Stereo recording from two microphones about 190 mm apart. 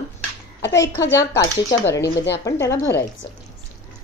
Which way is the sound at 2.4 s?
15° left (ahead or behind).